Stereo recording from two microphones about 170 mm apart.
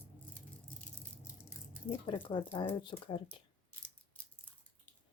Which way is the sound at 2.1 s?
30° left (ahead or behind).